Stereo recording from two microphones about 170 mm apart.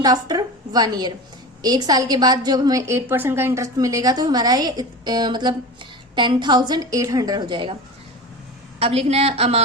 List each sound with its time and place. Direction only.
0.0 s a woman's voice: 25° right (ahead or behind)
8.8 s a woman's voice: 35° right (ahead or behind)